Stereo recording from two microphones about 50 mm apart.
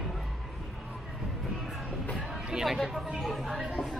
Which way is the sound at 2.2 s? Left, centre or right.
Centre.